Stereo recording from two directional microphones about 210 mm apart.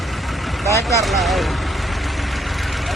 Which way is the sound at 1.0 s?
Centre (ahead or behind).